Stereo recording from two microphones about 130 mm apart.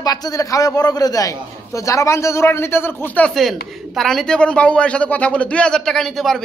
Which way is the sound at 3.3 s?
Centre (ahead or behind).